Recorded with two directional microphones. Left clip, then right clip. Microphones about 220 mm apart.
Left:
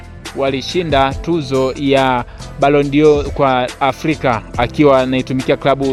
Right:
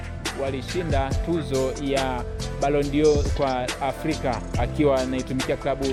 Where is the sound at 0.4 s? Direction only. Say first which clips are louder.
Left 13 dB; 45° left (ahead or behind).